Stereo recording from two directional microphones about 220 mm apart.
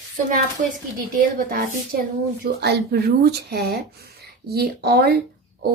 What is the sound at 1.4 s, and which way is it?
A woman's voice, 40° right (ahead or behind).